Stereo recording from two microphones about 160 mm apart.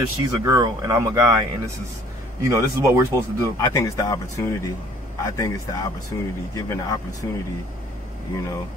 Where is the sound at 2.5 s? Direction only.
15° right (ahead or behind).